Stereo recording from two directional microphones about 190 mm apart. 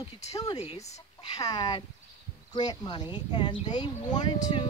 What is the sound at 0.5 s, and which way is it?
Speech, 35° left (ahead or behind).